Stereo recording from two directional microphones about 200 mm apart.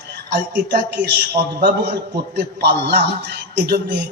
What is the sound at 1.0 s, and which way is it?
A man's voice, 55° right (ahead or behind).